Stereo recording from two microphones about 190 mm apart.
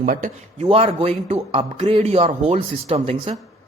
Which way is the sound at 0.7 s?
30° right (ahead or behind).